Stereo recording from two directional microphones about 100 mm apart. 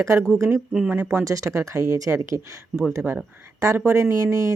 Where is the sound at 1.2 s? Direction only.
35° right (ahead or behind).